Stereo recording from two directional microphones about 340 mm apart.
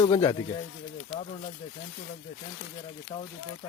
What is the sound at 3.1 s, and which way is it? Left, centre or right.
Speech, centre.